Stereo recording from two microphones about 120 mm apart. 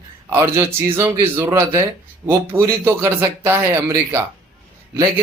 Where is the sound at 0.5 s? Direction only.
20° right (ahead or behind).